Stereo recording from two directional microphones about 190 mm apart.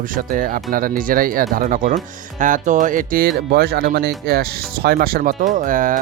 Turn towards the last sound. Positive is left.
turn(degrees=-45)  # may be behind; listen again after turning